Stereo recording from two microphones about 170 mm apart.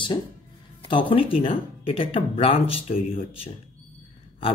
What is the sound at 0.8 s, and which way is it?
Speech, 30° left (ahead or behind).